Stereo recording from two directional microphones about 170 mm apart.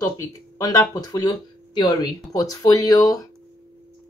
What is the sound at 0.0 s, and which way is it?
Speech, 20° left (ahead or behind).